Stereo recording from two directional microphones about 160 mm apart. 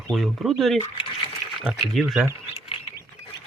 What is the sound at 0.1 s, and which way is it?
Speech, centre (ahead or behind).